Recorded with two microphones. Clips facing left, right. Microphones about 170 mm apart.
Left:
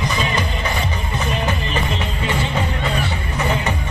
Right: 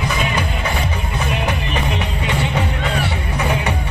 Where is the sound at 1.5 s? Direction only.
15° right (ahead or behind).